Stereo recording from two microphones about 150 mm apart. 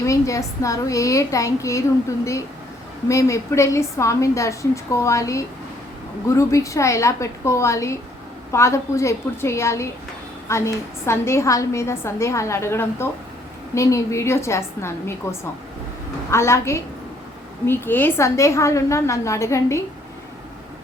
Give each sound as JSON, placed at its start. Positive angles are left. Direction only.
{"t": 0.0, "sound": "a woman's voice", "side_deg": 20}